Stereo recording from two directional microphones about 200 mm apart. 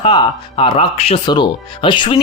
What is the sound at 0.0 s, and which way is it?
Speech, 25° left (ahead or behind).